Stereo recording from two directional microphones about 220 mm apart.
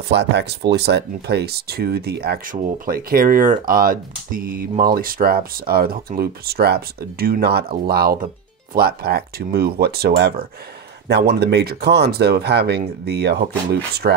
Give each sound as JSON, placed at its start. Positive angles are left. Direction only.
{"t": 0.1, "sound": "speech", "side_deg": -50}